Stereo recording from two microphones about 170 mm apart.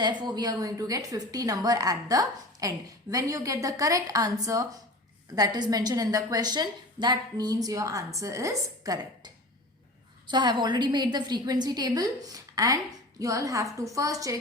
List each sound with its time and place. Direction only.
0.0 s a woman's voice: 25° right (ahead or behind)